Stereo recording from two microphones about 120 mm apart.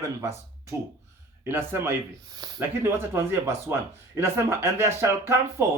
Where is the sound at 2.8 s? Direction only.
20° right (ahead or behind).